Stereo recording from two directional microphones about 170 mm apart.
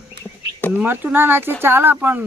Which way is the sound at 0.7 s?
10° right (ahead or behind).